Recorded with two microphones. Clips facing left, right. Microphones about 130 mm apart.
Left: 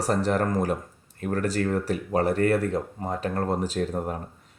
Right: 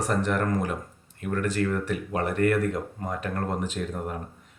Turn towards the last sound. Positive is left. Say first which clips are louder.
# left 4 dB
turn(degrees=35)  # may be behind; listen again after turning